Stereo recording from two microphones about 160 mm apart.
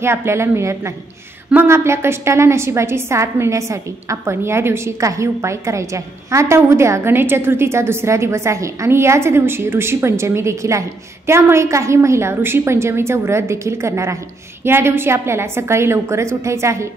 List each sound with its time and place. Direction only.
0.0 s a woman's voice: 15° right (ahead or behind)